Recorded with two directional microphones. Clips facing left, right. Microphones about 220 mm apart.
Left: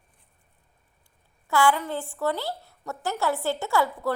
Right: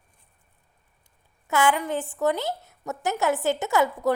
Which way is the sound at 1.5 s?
20° right (ahead or behind).